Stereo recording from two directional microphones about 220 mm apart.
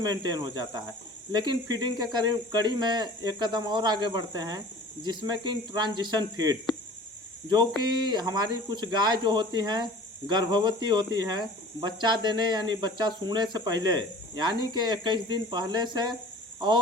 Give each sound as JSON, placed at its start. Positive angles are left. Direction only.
{"t": 0.0, "sound": "speech", "side_deg": -20}